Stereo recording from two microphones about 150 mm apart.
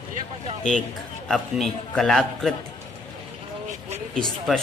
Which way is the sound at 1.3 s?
Centre (ahead or behind).